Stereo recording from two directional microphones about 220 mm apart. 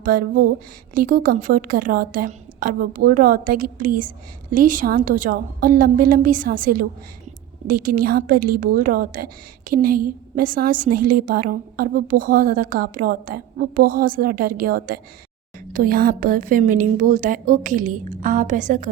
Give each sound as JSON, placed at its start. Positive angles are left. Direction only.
{"t": 0.0, "sound": "a woman's voice", "side_deg": -40}